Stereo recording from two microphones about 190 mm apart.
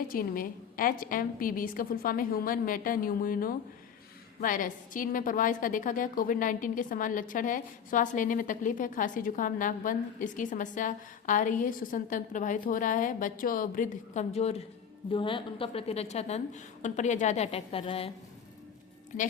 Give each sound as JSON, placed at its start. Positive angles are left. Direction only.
{"t": 0.1, "sound": "a woman's voice", "side_deg": 50}
{"t": 19.1, "sound": "a woman's voice", "side_deg": 40}